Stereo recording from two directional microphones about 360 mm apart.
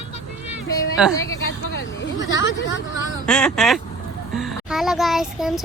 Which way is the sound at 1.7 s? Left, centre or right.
Left.